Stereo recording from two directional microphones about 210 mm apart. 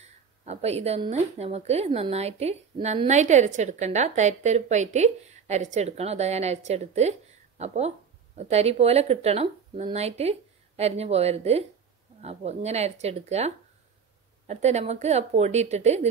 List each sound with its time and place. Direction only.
0.5 s a woman's voice: 30° right (ahead or behind)
14.5 s a woman's voice: 30° right (ahead or behind)